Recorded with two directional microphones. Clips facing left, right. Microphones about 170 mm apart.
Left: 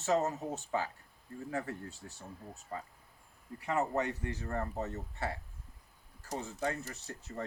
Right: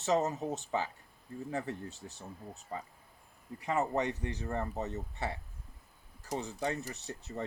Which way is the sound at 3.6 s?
20° right (ahead or behind).